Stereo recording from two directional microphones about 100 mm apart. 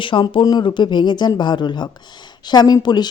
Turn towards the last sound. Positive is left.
turn(degrees=45)  # may be behind; listen again after turning